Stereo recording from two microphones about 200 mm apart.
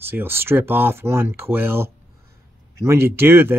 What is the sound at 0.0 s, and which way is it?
Speech, 10° right (ahead or behind).